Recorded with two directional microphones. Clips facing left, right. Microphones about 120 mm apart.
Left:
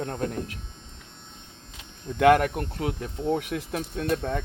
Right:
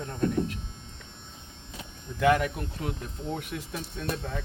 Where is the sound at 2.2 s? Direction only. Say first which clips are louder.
Left 5 dB; 60° left (ahead or behind).